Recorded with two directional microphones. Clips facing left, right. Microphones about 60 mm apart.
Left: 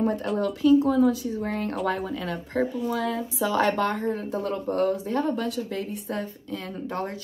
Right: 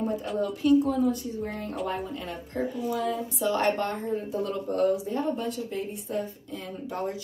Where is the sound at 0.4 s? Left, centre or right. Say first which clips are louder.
Left 2 dB; left.